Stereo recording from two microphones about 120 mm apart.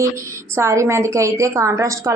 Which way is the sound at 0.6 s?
25° right (ahead or behind).